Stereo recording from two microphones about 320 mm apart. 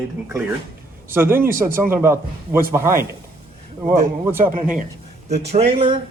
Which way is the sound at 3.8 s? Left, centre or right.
Right.